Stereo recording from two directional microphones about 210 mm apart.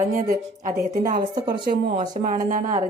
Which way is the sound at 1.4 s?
20° right (ahead or behind).